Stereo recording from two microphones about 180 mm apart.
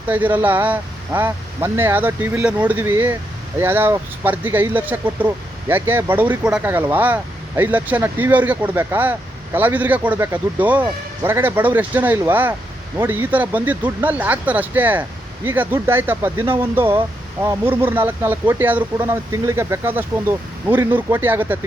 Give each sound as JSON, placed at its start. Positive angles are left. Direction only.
{"t": 0.1, "sound": "speech", "side_deg": -10}